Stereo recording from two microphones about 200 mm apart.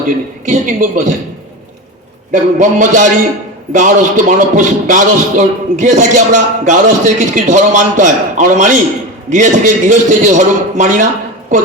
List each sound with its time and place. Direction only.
0.4 s a man's voice: 40° right (ahead or behind)
2.3 s a man's voice: 40° right (ahead or behind)